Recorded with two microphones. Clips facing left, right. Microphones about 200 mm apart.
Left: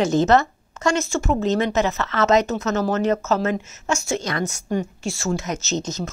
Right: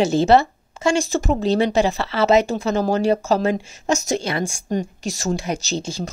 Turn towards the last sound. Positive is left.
turn(degrees=-30)  # may be behind; listen again after turning